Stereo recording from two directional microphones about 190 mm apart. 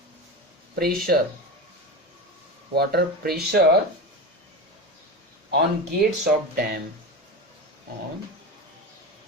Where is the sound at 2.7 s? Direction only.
55° right (ahead or behind).